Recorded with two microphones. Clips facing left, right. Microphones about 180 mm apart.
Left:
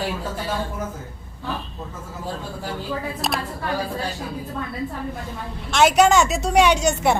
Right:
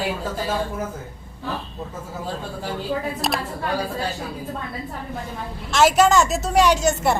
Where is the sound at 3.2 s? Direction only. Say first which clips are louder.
Right 1 dB; centre (ahead or behind).